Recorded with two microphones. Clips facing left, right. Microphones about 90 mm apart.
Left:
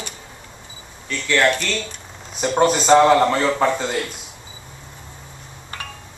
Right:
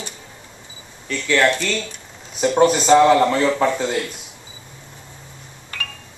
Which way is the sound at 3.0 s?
20° left (ahead or behind).